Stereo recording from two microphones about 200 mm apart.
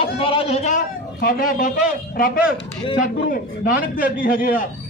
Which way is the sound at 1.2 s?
45° left (ahead or behind).